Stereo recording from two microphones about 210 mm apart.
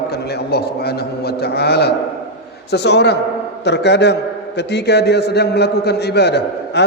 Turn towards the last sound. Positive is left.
turn(degrees=55)  # may be behind; listen again after turning